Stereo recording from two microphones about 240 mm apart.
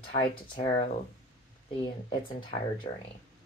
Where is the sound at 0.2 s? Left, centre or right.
Centre.